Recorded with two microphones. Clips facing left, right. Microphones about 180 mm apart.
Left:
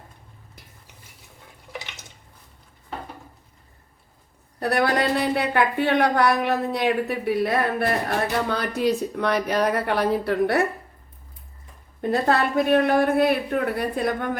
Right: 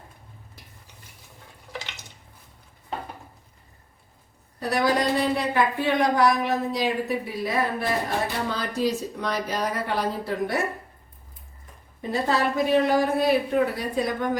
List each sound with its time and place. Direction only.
4.6 s speech: 60° left (ahead or behind)
12.1 s speech: 60° left (ahead or behind)